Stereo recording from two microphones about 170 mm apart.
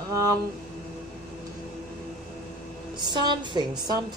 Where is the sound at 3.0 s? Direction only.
25° right (ahead or behind).